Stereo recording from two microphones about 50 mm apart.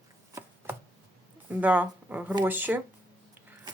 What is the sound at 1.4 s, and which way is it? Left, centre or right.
Speech, right.